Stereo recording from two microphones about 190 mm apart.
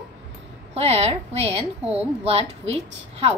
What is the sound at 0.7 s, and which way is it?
A woman's voice, 35° right (ahead or behind).